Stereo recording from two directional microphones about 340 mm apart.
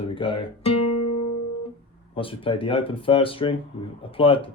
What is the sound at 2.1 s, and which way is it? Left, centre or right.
Speech, centre.